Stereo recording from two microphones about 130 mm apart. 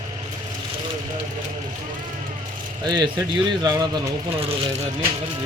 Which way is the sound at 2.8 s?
35° right (ahead or behind).